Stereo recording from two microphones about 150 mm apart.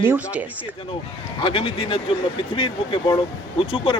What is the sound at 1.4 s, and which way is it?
Speech, 35° left (ahead or behind).